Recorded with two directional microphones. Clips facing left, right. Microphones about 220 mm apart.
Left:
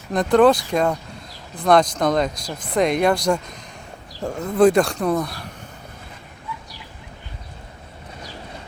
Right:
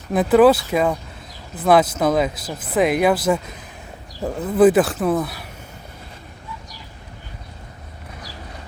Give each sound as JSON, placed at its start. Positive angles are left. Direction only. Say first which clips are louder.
{"t": 0.1, "sound": "speech", "louder": "right 2 dB", "side_deg": -5}